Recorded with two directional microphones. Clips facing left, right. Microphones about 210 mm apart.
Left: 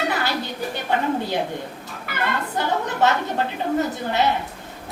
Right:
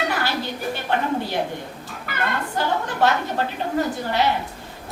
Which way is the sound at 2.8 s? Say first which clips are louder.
Even; 20° left (ahead or behind).